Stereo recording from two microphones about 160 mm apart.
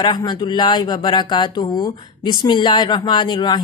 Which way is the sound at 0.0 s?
30° left (ahead or behind).